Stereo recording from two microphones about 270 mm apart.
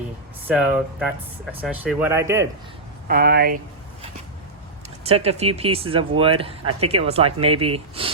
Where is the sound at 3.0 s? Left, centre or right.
Right.